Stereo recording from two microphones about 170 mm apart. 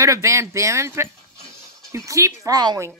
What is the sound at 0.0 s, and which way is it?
Speech, 20° right (ahead or behind).